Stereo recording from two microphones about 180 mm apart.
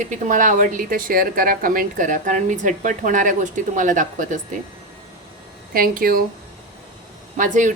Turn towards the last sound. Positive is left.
turn(degrees=-45)  # may be behind; listen again after turning